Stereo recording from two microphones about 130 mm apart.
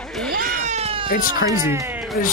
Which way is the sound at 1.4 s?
25° right (ahead or behind).